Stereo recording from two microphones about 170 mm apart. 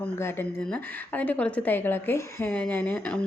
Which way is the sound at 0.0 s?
15° left (ahead or behind).